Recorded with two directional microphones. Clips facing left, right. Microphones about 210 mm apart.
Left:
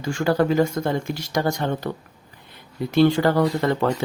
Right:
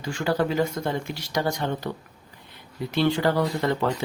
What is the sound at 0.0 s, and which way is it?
Speech, 45° left (ahead or behind).